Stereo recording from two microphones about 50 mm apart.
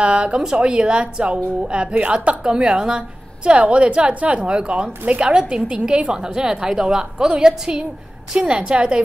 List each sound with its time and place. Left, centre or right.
0.0 s a woman's voice: right
5.3 s a woman's voice: centre